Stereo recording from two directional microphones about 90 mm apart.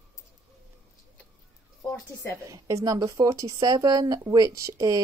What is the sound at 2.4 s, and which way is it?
Speech, 35° right (ahead or behind).